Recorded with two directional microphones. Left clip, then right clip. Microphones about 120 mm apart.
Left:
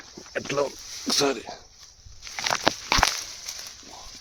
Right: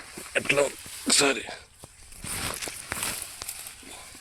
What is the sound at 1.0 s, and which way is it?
Speech, 50° left (ahead or behind).